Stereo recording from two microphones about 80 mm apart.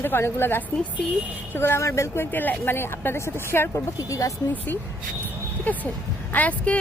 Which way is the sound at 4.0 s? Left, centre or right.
Left.